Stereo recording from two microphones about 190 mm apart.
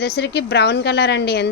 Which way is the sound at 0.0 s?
60° left (ahead or behind).